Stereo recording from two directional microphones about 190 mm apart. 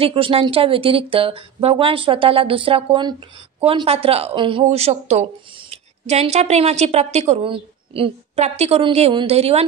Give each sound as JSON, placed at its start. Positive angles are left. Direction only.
{"t": 0.0, "sound": "speech", "side_deg": -30}